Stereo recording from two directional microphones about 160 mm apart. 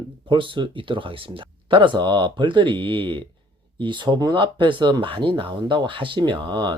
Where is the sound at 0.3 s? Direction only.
30° right (ahead or behind).